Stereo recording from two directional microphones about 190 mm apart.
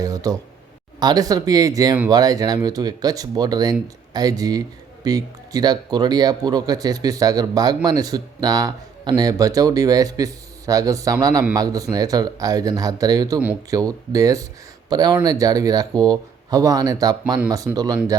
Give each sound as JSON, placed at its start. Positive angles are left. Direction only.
{"t": 0.0, "sound": "speech", "side_deg": -20}